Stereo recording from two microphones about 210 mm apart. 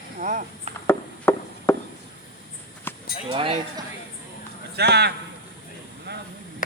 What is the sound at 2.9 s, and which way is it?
Cattle, 10° left (ahead or behind).